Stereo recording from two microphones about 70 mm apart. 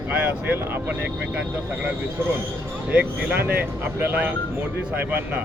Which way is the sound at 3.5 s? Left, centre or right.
Right.